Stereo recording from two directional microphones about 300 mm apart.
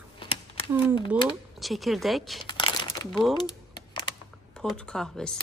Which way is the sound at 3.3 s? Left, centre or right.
Centre.